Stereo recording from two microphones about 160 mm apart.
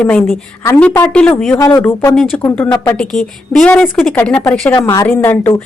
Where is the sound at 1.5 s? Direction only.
20° left (ahead or behind).